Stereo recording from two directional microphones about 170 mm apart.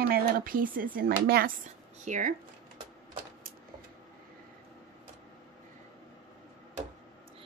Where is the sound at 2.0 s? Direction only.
50° right (ahead or behind).